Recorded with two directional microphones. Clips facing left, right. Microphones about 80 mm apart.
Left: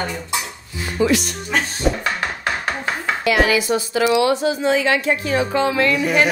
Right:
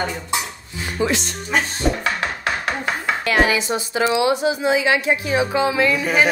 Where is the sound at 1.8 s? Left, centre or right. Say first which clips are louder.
Left 2 dB; centre.